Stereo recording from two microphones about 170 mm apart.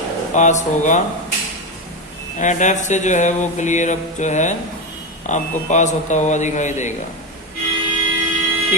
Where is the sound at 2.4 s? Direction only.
45° left (ahead or behind).